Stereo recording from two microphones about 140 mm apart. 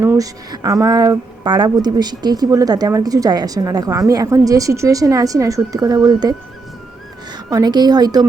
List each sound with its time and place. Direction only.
0.0 s speech: 15° right (ahead or behind)
7.3 s speech: 30° right (ahead or behind)